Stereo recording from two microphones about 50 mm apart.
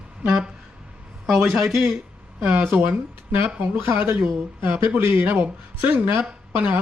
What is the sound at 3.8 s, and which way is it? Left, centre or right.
A woman's voice, right.